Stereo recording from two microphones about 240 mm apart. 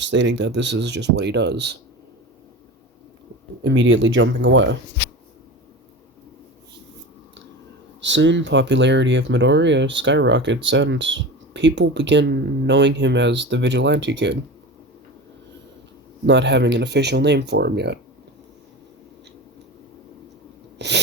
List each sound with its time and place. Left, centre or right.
0.0 s speech: right
3.6 s speech: right
8.0 s speech: right
16.2 s speech: right
20.7 s sneeze: right